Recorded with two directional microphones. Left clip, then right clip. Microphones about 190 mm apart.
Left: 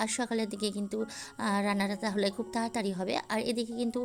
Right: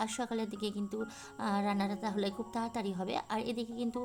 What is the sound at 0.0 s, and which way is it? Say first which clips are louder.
A woman's voice: left 4 dB; 15° left (ahead or behind).